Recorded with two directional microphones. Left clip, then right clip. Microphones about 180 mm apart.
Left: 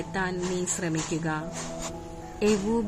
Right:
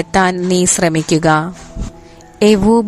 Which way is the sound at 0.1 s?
60° right (ahead or behind).